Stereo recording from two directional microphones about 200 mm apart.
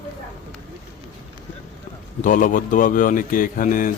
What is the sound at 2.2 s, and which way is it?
Speech, 40° left (ahead or behind).